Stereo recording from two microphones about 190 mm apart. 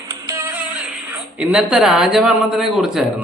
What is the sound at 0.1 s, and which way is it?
Music, 15° right (ahead or behind).